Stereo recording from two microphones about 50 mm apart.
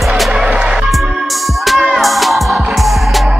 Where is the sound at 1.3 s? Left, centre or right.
Centre.